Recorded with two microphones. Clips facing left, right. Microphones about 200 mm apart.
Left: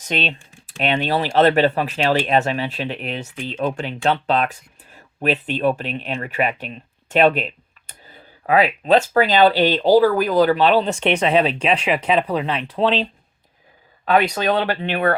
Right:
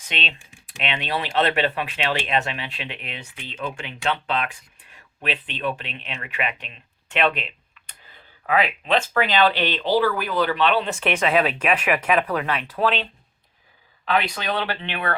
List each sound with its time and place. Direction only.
0.1 s speech: 40° left (ahead or behind)
14.0 s speech: 45° left (ahead or behind)